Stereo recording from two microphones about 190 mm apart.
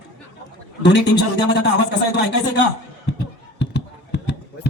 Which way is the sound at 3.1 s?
65° left (ahead or behind).